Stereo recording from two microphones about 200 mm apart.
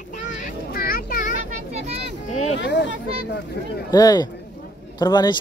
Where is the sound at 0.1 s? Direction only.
40° left (ahead or behind).